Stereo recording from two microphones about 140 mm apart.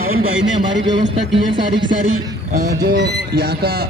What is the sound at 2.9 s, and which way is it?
Speech, 90° right.